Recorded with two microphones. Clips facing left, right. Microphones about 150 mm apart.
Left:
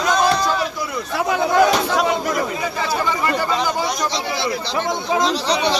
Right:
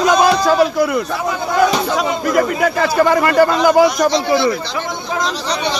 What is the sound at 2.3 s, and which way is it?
Speech, 65° right (ahead or behind).